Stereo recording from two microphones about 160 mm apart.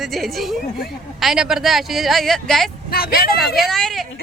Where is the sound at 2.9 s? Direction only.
70° left (ahead or behind).